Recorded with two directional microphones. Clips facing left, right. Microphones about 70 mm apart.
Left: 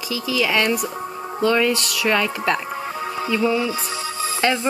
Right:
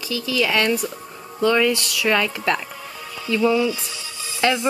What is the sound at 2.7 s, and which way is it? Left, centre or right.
Music, left.